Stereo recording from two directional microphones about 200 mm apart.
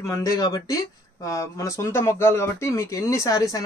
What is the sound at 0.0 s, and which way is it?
Speech, 15° left (ahead or behind).